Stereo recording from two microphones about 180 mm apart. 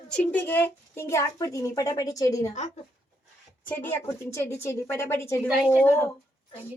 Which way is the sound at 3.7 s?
10° left (ahead or behind).